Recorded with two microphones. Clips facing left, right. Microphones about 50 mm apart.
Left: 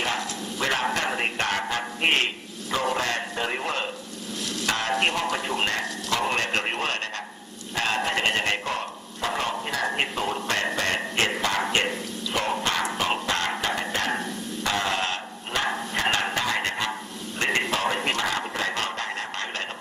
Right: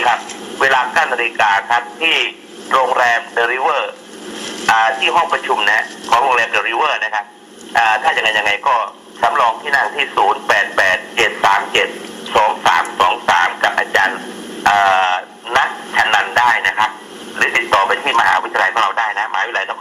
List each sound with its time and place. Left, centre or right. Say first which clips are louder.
0.6 s speech: right 12 dB; right
14.6 s music: right 15 dB; right
16.0 s speech: right 14 dB; right